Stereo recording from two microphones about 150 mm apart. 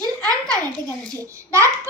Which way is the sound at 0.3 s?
25° right (ahead or behind).